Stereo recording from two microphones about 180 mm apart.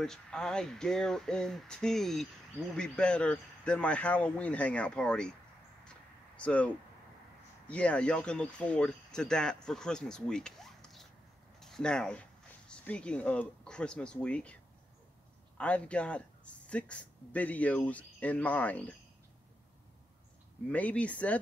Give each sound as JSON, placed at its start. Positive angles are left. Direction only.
{"t": 0.0, "sound": "speech", "side_deg": 5}
{"t": 5.9, "sound": "a sound", "side_deg": 5}
{"t": 7.7, "sound": "speech", "side_deg": 5}
{"t": 20.7, "sound": "speech", "side_deg": 10}